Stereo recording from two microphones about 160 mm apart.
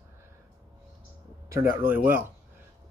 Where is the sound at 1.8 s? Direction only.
10° right (ahead or behind).